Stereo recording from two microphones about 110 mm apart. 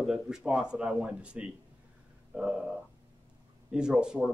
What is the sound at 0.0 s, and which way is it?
Speech, 5° right (ahead or behind).